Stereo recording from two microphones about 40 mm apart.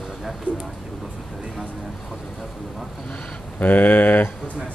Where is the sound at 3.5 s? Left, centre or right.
Left.